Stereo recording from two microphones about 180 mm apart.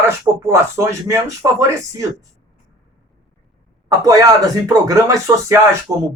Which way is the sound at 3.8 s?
20° right (ahead or behind).